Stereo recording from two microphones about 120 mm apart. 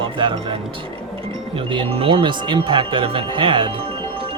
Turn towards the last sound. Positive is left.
turn(degrees=-55)  # may be behind; listen again after turning